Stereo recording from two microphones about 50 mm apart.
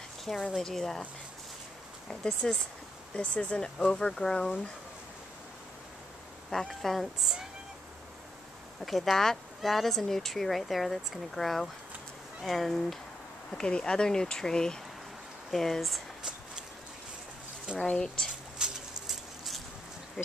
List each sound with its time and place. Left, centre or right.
0.2 s speech: centre
2.0 s speech: centre
3.2 s speech: left
6.5 s speech: centre
8.8 s speech: centre
13.5 s speech: centre
17.7 s speech: centre
18.6 s a sound: centre